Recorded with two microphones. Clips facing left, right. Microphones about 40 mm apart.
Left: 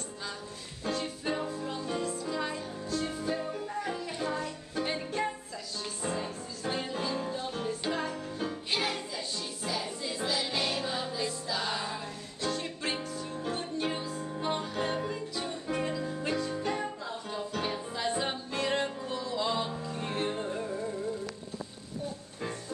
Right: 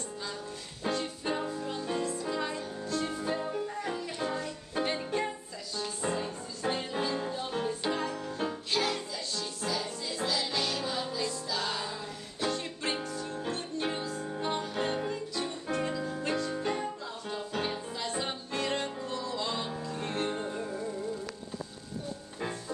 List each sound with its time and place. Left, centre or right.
0.8 s music: centre
8.7 s music: centre
12.5 s music: centre
17.9 s music: centre